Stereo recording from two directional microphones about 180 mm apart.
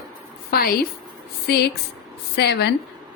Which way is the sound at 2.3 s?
70° left (ahead or behind).